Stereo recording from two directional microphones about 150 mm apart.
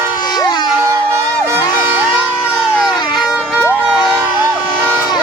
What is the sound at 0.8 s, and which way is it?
Music, 20° right (ahead or behind).